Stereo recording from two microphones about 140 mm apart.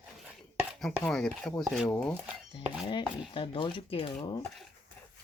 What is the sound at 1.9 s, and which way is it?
Speech, 15° left (ahead or behind).